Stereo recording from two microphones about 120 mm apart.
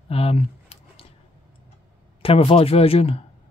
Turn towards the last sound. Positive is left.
turn(degrees=55)  # may be behind; listen again after turning